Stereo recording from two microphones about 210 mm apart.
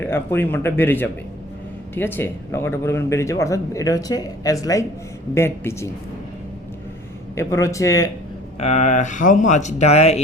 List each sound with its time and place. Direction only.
0.0 s a man's voice: 10° left (ahead or behind)
7.3 s a man's voice: 15° left (ahead or behind)
8.5 s speech: 35° left (ahead or behind)